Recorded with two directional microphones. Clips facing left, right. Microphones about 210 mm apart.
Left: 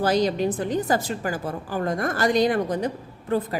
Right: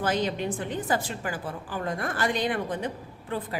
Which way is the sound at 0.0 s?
40° left (ahead or behind).